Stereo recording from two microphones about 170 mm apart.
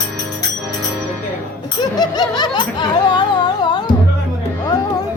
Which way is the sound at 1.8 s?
25° left (ahead or behind).